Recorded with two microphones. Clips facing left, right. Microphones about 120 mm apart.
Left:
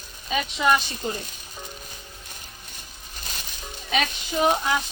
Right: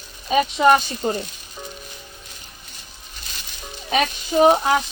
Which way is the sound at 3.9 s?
35° right (ahead or behind).